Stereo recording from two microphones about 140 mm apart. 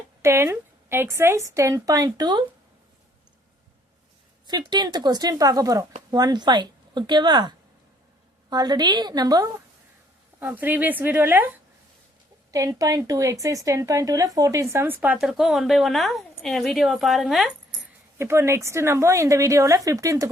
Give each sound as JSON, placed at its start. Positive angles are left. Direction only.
{"t": 0.2, "sound": "a sound", "side_deg": -20}
{"t": 1.2, "sound": "a woman's voice", "side_deg": -20}
{"t": 4.4, "sound": "a woman's voice", "side_deg": -30}
{"t": 10.4, "sound": "a woman's voice", "side_deg": -15}
{"t": 18.2, "sound": "a woman's voice", "side_deg": -20}